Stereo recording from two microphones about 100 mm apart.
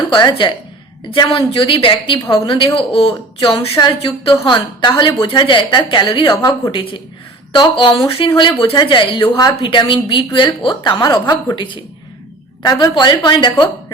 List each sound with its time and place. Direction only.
0.1 s a woman's voice: 55° left (ahead or behind)
2.7 s speech: 70° left (ahead or behind)
3.4 s a woman's voice: 60° left (ahead or behind); by 11.3 s 45° left (ahead or behind)
11.5 s a woman's voice: 55° left (ahead or behind)
12.6 s a woman's voice: 40° left (ahead or behind)
12.9 s a woman's voice: 50° left (ahead or behind)